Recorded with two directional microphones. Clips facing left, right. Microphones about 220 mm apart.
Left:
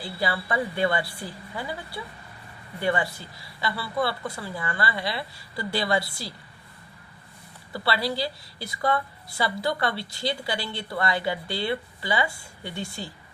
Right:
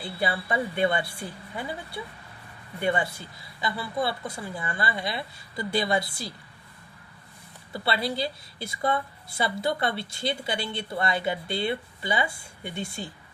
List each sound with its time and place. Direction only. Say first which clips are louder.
0.0 s a woman's voice: even; 20° right (ahead or behind)
7.7 s a woman's voice: left 1 dB; 20° right (ahead or behind)